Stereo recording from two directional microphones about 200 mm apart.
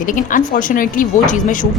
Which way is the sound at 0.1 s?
40° left (ahead or behind).